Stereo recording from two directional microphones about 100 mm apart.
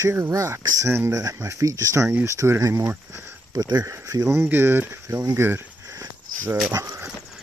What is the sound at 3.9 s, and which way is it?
Speech, 30° right (ahead or behind).